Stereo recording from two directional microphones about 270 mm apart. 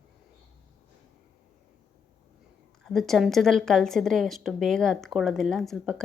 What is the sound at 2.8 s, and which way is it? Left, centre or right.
Speech, centre.